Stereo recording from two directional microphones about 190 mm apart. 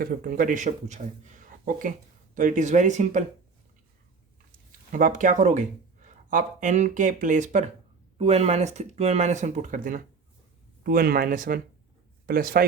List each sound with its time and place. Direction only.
0.0 s speech: 50° right (ahead or behind)
4.9 s speech: 45° right (ahead or behind)